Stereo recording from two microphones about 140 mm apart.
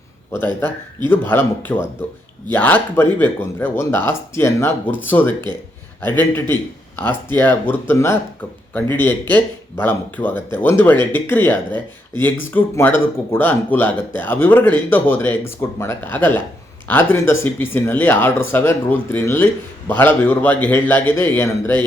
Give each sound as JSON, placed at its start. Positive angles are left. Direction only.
{"t": 0.3, "sound": "speech", "side_deg": 15}